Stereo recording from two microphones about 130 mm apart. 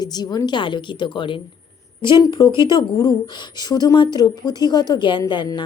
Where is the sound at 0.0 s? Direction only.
30° left (ahead or behind).